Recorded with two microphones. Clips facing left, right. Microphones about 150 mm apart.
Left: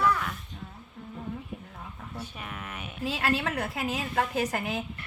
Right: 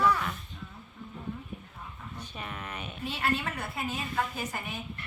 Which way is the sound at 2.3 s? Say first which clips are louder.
Even; 5° left (ahead or behind).